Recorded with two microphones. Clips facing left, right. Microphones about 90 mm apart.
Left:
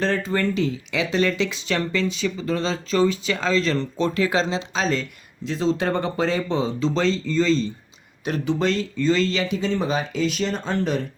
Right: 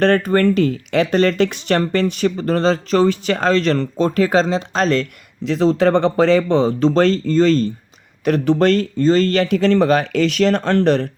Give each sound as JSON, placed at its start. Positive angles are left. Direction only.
{"t": 0.0, "sound": "speech", "side_deg": -60}
{"t": 5.5, "sound": "speech", "side_deg": -75}